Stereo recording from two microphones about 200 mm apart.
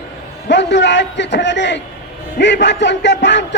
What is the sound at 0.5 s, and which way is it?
A man's voice, 60° left (ahead or behind).